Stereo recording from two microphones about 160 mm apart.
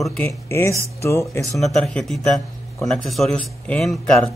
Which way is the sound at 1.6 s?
5° left (ahead or behind).